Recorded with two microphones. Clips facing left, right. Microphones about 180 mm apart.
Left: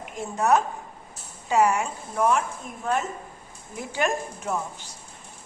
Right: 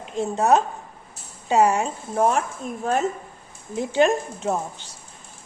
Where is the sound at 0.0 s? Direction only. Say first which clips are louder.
Right 4 dB; 25° right (ahead or behind).